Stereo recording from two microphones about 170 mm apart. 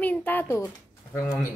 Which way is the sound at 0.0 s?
10° left (ahead or behind).